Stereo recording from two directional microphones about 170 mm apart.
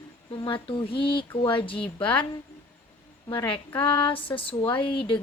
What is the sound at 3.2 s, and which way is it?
Speech, 25° left (ahead or behind).